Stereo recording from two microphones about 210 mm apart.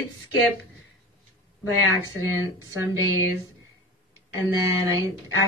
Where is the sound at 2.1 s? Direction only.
15° right (ahead or behind).